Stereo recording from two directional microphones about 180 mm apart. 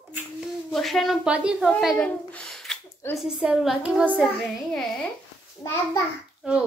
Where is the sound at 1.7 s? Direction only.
Centre (ahead or behind).